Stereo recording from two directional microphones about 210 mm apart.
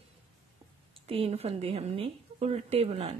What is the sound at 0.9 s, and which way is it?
A woman's voice, 25° right (ahead or behind).